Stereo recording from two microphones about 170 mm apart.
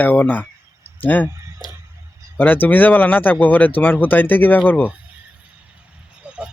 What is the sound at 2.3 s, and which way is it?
Speech, 10° left (ahead or behind).